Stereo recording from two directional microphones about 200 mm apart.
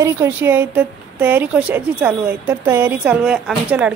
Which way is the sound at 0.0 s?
10° right (ahead or behind).